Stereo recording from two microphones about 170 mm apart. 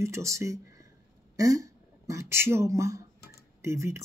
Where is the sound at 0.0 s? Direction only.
15° right (ahead or behind).